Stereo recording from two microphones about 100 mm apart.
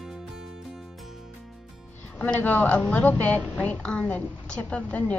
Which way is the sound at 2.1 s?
15° left (ahead or behind).